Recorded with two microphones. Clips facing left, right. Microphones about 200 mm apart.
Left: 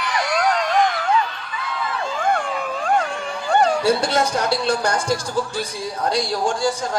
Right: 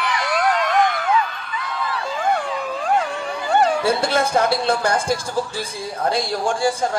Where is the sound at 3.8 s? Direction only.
55° right (ahead or behind).